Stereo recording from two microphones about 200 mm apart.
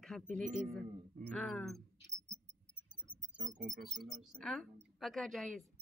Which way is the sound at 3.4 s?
40° right (ahead or behind).